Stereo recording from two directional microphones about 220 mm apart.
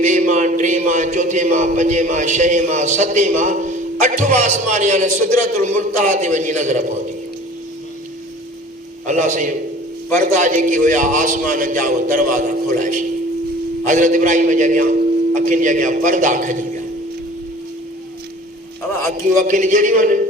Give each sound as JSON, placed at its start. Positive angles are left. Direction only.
{"t": 0.0, "sound": "a man's voice", "side_deg": -35}
{"t": 9.0, "sound": "a man's voice", "side_deg": -35}
{"t": 19.3, "sound": "a man's voice", "side_deg": -35}